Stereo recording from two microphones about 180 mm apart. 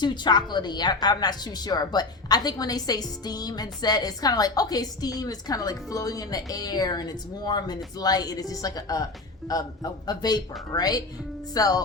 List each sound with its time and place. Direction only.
0.0 s a woman's voice: 25° left (ahead or behind)